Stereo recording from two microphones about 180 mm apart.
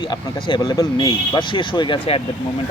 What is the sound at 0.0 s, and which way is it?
Speech, 25° left (ahead or behind).